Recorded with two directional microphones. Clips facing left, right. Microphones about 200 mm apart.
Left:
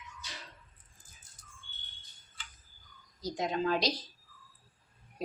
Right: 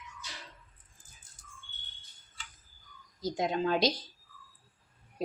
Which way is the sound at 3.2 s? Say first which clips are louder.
Right 2 dB; 25° right (ahead or behind).